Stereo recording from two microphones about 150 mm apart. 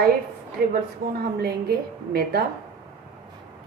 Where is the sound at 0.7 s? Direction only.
90° right.